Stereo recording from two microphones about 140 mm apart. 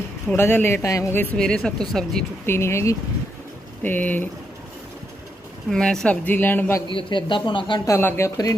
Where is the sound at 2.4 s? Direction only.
20° left (ahead or behind).